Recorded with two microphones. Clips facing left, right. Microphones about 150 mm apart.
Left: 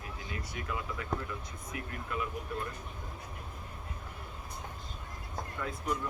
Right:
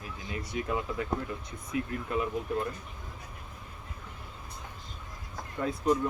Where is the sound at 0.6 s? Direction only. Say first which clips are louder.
Right 10 dB; 25° right (ahead or behind).